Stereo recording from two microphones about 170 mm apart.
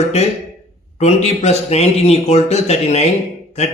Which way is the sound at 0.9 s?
40° left (ahead or behind).